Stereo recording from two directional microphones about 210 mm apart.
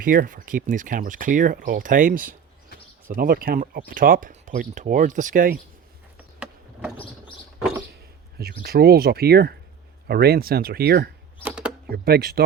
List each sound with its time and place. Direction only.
0.0 s speech: 40° right (ahead or behind)
6.9 s bird: 25° left (ahead or behind)
8.4 s speech: 45° right (ahead or behind)
11.4 s a sound: 5° right (ahead or behind)
11.9 s speech: 45° right (ahead or behind)